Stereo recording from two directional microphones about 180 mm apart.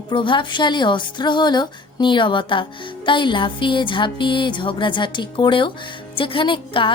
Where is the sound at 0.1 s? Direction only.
25° left (ahead or behind).